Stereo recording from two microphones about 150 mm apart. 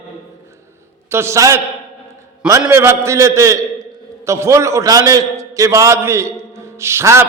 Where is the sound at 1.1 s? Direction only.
15° right (ahead or behind).